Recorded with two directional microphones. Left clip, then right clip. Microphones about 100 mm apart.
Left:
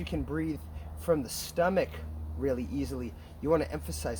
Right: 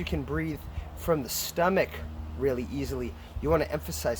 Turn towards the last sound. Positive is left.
turn(degrees=-50)  # may be behind; listen again after turning